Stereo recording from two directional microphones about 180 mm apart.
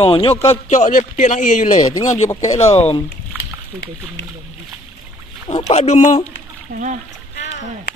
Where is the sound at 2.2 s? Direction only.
20° left (ahead or behind).